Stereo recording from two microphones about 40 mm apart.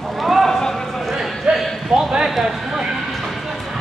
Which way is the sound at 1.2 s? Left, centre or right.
Centre.